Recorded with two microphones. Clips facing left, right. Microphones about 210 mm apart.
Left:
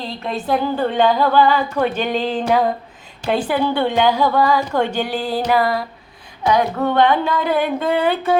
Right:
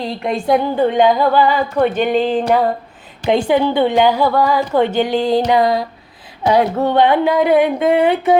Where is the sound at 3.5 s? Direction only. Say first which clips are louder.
Right 5 dB; 20° right (ahead or behind).